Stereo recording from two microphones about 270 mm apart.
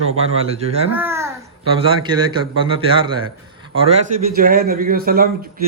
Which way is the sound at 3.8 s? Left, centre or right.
Right.